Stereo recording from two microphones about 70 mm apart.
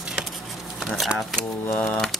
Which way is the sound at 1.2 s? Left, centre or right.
Centre.